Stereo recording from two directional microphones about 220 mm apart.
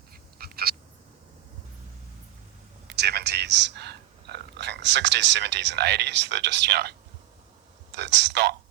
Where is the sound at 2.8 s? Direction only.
50° right (ahead or behind).